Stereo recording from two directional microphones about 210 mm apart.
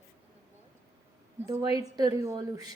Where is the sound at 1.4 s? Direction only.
15° right (ahead or behind).